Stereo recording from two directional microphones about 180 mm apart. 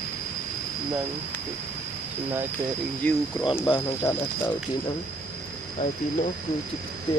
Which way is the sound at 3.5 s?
25° left (ahead or behind).